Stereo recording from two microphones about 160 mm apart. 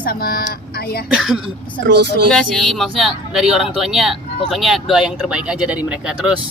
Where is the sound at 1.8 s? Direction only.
90° right.